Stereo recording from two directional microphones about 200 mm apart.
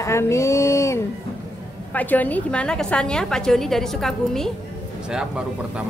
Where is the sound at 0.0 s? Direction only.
15° left (ahead or behind).